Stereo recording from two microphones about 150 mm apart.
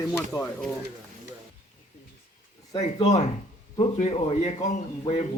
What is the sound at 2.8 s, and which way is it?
Speech, 45° left (ahead or behind).